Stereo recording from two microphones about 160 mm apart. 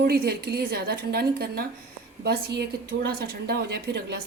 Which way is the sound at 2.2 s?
90° right.